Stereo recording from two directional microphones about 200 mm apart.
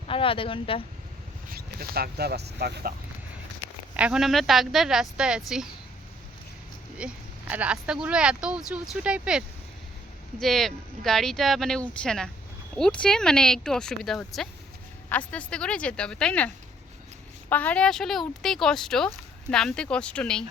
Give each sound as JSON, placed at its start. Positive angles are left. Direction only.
{"t": 0.1, "sound": "speech", "side_deg": 25}
{"t": 1.5, "sound": "speech", "side_deg": -50}
{"t": 3.9, "sound": "speech", "side_deg": -5}
{"t": 7.0, "sound": "speech", "side_deg": -5}
{"t": 10.4, "sound": "speech", "side_deg": 0}
{"t": 17.5, "sound": "speech", "side_deg": 5}